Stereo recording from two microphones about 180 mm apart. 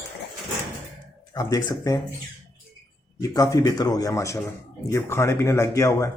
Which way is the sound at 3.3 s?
20° left (ahead or behind).